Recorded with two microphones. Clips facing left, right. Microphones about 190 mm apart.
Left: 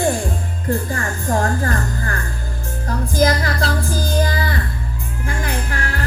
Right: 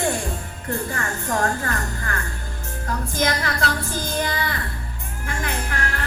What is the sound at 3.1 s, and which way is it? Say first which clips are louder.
Speech: left 6 dB; 35° left (ahead or behind).